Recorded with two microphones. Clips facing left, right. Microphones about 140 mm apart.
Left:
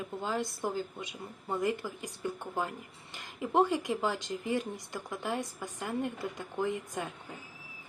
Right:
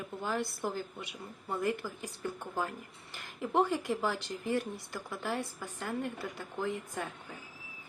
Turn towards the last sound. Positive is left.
turn(degrees=15)  # may be behind; listen again after turning